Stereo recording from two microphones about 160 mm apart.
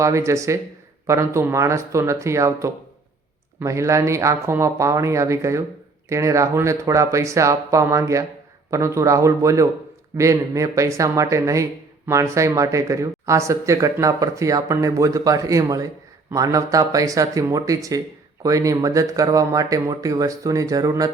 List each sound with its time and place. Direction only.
0.0 s speech: 20° right (ahead or behind)